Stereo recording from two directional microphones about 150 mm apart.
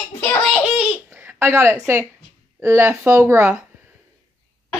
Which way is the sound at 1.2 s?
15° right (ahead or behind).